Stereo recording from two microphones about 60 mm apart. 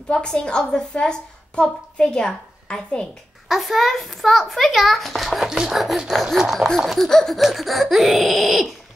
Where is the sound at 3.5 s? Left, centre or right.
Centre.